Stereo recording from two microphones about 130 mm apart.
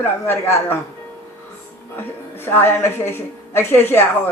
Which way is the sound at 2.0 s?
15° left (ahead or behind).